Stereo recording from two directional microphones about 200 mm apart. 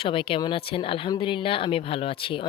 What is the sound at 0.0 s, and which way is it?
Speech, 25° left (ahead or behind).